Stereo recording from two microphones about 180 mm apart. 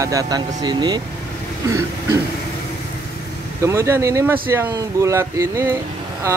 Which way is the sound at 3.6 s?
15° right (ahead or behind).